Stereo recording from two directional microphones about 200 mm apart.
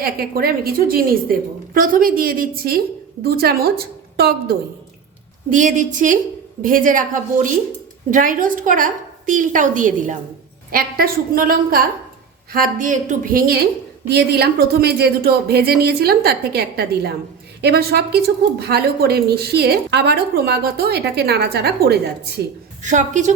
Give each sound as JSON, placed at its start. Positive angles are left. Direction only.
{"t": 0.0, "sound": "a woman's voice", "side_deg": -50}
{"t": 5.5, "sound": "a woman's voice", "side_deg": -40}
{"t": 22.8, "sound": "a woman's voice", "side_deg": -40}